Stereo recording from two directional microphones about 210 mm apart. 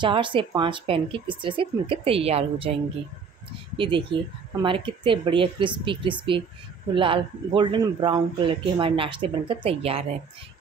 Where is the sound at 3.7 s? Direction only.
25° right (ahead or behind).